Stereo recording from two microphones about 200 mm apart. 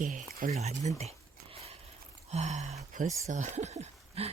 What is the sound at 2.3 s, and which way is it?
Speech, 35° right (ahead or behind).